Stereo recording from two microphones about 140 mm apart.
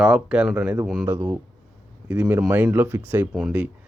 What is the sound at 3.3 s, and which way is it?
Speech, 5° right (ahead or behind).